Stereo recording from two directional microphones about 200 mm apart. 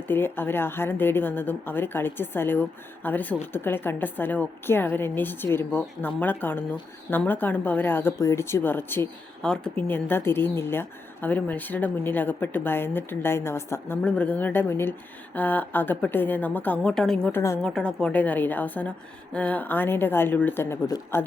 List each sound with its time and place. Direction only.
0.1 s speech: 10° left (ahead or behind)